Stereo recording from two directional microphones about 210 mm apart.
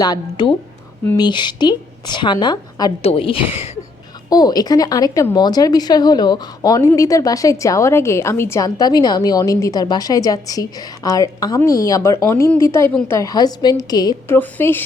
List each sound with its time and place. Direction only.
0.0 s a woman's voice: 20° left (ahead or behind)
12.9 s a woman's voice: 5° left (ahead or behind)
13.1 s a woman's voice: 20° left (ahead or behind)